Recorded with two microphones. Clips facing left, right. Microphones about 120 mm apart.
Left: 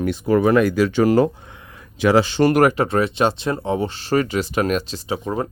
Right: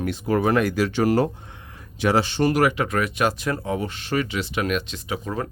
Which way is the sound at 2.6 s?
40° left (ahead or behind).